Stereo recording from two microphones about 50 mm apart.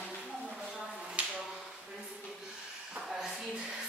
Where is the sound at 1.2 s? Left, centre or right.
Right.